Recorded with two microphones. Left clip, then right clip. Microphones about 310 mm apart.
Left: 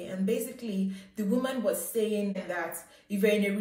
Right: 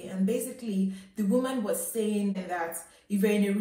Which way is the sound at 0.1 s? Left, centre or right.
Centre.